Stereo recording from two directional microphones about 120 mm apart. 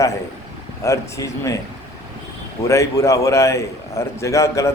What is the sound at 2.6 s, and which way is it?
A man's voice, 25° left (ahead or behind).